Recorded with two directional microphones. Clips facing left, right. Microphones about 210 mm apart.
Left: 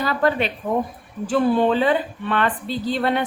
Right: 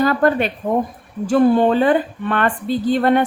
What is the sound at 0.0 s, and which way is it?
A woman's voice, 50° right (ahead or behind).